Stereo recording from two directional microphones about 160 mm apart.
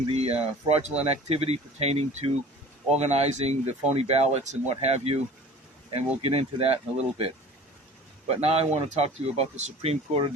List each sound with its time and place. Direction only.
0.1 s speech: 40° right (ahead or behind)
6.2 s speech: 40° right (ahead or behind)
8.3 s speech: 40° right (ahead or behind)